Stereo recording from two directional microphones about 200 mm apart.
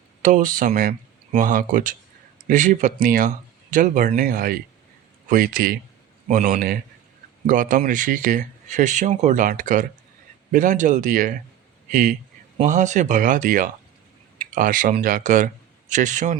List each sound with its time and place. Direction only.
0.2 s speech: 40° right (ahead or behind)